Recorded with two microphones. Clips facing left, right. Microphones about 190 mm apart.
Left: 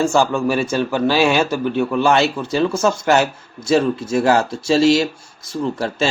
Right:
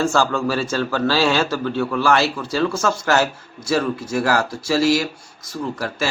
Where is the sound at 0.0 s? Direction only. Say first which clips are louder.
Left 3 dB; 15° left (ahead or behind).